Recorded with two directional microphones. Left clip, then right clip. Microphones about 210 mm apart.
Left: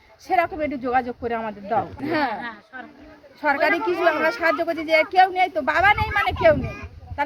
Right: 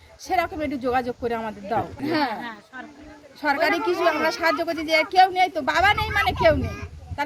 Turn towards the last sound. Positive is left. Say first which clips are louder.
# left 1 dB
turn(degrees=-5)  # may be behind; listen again after turning